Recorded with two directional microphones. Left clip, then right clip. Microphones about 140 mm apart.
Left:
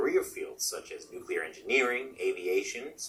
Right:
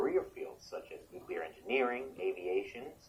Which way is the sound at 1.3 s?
25° left (ahead or behind).